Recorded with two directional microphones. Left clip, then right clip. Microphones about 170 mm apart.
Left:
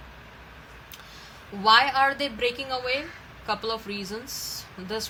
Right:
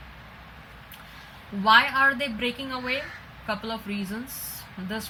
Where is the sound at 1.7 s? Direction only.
35° left (ahead or behind).